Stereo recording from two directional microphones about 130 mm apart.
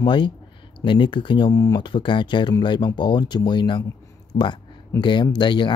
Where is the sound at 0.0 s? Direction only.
35° left (ahead or behind).